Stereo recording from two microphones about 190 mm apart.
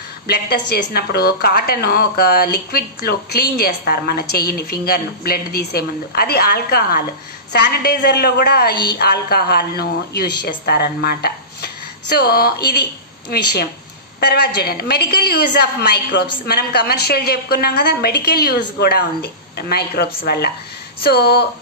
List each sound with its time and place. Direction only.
0.3 s a woman's voice: 55° left (ahead or behind)